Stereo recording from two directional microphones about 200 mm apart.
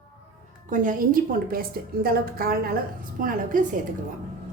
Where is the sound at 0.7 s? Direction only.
40° right (ahead or behind).